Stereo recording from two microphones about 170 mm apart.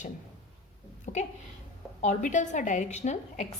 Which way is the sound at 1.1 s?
45° left (ahead or behind).